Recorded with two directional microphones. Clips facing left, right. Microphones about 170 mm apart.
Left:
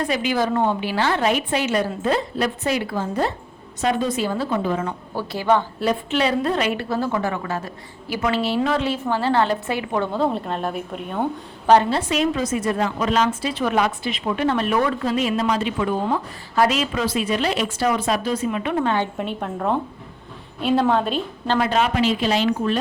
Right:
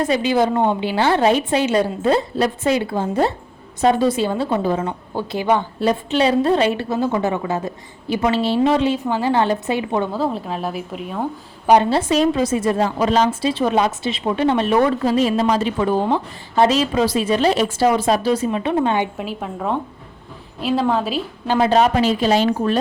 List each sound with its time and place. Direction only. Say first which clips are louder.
0.0 s a woman's voice: right 4 dB; 25° right (ahead or behind)
5.9 s a woman's voice: right 4 dB; 30° right (ahead or behind)
10.1 s a woman's voice: even; centre (ahead or behind)
11.9 s a woman's voice: right 4 dB; 30° right (ahead or behind)
19.1 s a woman's voice: even; centre (ahead or behind)
21.6 s a woman's voice: right 5 dB; 35° right (ahead or behind)